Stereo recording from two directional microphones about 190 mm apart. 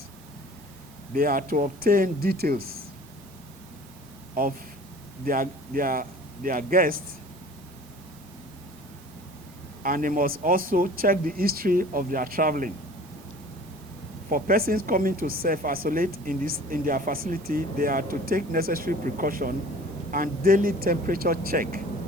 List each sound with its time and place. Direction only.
1.1 s speech: 45° right (ahead or behind)
4.4 s a man's voice: 50° right (ahead or behind)
9.8 s speech: 45° right (ahead or behind)
14.3 s speech: 45° right (ahead or behind)